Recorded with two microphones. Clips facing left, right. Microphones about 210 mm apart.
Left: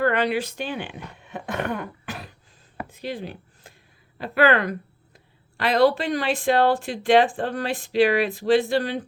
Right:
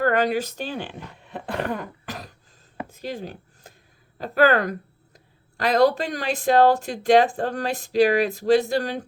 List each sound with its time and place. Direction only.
0.0 s speech: 45° right (ahead or behind)
2.0 s throat clearing: 40° right (ahead or behind)
2.9 s a sound: 45° right (ahead or behind)
4.2 s speech: 40° right (ahead or behind)